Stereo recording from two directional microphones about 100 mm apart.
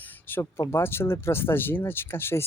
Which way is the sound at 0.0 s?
20° left (ahead or behind).